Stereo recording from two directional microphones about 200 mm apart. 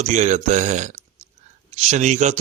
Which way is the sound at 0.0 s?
35° right (ahead or behind).